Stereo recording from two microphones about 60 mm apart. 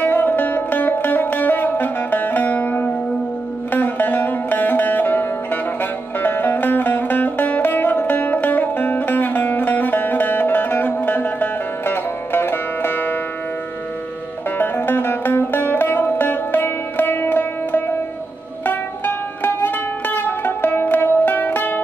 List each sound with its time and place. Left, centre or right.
0.0 s music: left
14.6 s music: left